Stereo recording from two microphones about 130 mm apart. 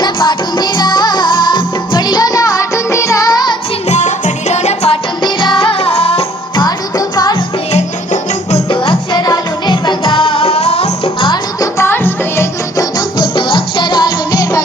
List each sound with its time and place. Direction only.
0.0 s music: 35° left (ahead or behind)
3.8 s music: 65° left (ahead or behind)
5.2 s music: 40° left (ahead or behind)
6.6 s music: 30° left (ahead or behind)
7.7 s music: 60° left (ahead or behind)
8.7 s music: 40° left (ahead or behind)
11.8 s music: 15° left (ahead or behind)